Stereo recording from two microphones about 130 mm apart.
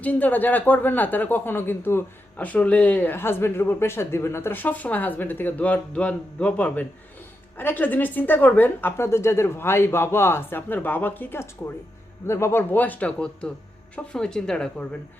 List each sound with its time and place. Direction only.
0.0 s a woman's voice: 10° left (ahead or behind)